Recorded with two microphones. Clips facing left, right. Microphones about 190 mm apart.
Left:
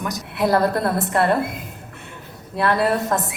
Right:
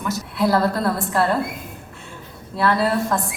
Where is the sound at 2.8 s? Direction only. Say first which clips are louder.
Even; 20° left (ahead or behind).